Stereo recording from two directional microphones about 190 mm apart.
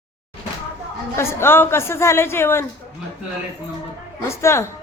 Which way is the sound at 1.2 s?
15° left (ahead or behind).